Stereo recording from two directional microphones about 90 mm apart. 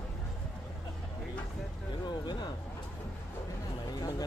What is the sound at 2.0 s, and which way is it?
Speech, 50° left (ahead or behind).